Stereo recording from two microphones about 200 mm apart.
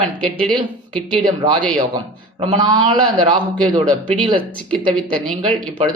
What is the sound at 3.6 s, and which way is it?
Speech, 5° left (ahead or behind).